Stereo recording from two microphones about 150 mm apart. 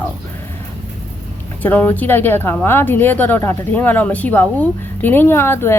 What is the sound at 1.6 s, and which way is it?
Speech, 10° left (ahead or behind).